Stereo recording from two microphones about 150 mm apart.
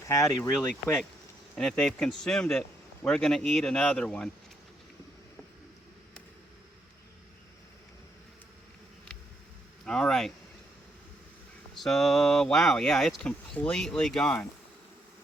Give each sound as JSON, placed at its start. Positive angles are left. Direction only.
{"t": 0.1, "sound": "speech", "side_deg": 20}
{"t": 1.5, "sound": "speech", "side_deg": 5}
{"t": 9.8, "sound": "speech", "side_deg": 5}
{"t": 11.8, "sound": "speech", "side_deg": 5}